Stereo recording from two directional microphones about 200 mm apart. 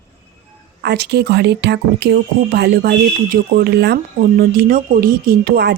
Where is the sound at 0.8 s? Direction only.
55° right (ahead or behind).